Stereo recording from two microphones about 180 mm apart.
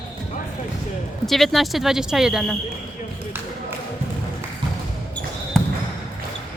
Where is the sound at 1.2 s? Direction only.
Centre (ahead or behind).